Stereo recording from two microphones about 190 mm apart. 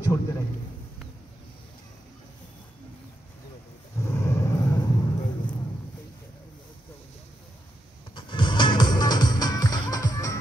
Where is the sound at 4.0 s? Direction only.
15° left (ahead or behind).